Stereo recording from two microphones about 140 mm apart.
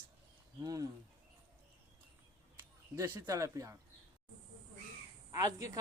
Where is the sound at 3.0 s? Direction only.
25° right (ahead or behind).